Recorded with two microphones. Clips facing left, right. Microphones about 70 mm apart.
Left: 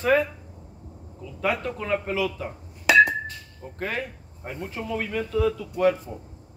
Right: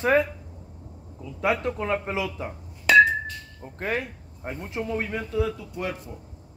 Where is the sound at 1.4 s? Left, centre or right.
Right.